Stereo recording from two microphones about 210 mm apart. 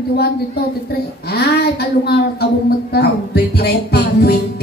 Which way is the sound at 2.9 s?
50° left (ahead or behind).